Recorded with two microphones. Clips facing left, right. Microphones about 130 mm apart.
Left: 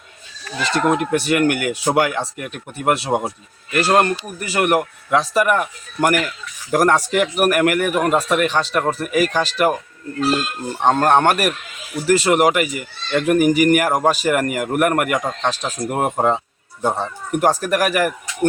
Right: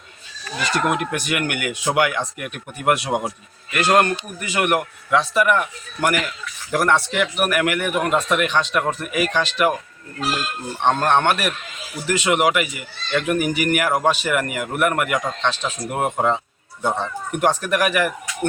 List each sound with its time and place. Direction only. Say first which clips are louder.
0.9 s speech: left 5 dB; 30° left (ahead or behind)
10.8 s speech: left 3 dB; 40° left (ahead or behind)
15.1 s speech: left 2 dB; centre (ahead or behind)
15.4 s speech: left 2 dB; 40° left (ahead or behind)